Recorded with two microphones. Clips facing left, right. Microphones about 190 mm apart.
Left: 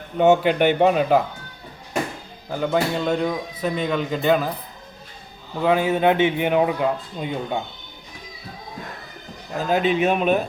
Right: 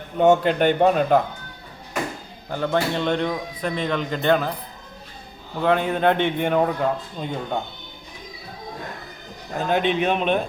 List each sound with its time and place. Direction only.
0.2 s speech: 10° left (ahead or behind)
2.5 s speech: 5° left (ahead or behind)
5.6 s speech: 5° left (ahead or behind)
9.6 s speech: 5° left (ahead or behind)